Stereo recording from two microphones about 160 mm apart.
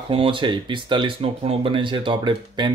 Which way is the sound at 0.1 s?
35° right (ahead or behind).